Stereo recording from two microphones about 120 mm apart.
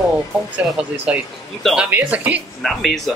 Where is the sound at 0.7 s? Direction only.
5° right (ahead or behind).